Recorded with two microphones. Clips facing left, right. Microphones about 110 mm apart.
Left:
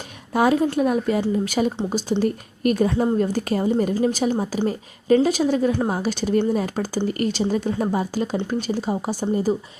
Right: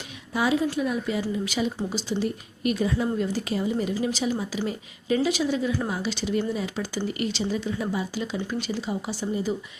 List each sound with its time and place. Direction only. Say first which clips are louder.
0.3 s speech: left 6 dB; 50° left (ahead or behind)